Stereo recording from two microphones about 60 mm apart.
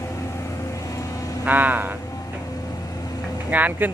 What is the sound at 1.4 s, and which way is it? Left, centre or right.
Speech, right.